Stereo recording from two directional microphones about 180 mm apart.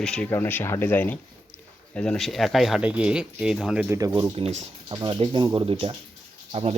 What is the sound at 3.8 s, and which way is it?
Speech, 15° right (ahead or behind).